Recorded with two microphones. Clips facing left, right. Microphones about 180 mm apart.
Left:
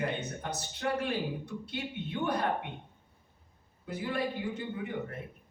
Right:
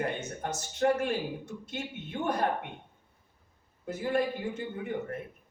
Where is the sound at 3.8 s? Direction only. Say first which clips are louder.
Right 4 dB; 45° right (ahead or behind).